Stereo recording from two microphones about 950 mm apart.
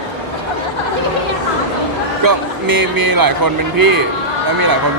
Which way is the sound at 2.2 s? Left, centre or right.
Right.